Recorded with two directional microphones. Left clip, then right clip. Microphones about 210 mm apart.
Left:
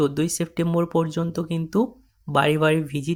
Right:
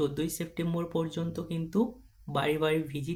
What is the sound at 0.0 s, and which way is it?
Speech, 35° left (ahead or behind).